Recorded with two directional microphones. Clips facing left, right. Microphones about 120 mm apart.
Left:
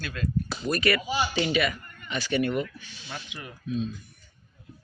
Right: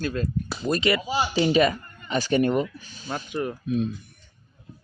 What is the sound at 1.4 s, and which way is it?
Speech, 35° right (ahead or behind).